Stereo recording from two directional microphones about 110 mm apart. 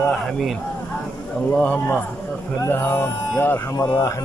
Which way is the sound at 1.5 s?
15° left (ahead or behind).